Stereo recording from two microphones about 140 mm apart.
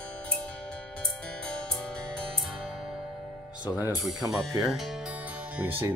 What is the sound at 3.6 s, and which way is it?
Speech, 25° left (ahead or behind).